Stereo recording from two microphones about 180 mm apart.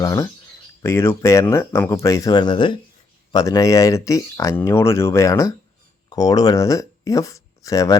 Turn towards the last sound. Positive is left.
turn(degrees=20)  # may be behind; listen again after turning